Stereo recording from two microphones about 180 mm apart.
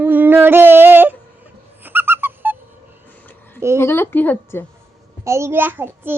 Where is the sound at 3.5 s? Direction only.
15° right (ahead or behind).